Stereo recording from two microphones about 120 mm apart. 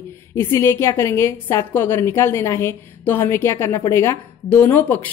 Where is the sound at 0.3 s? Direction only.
20° left (ahead or behind).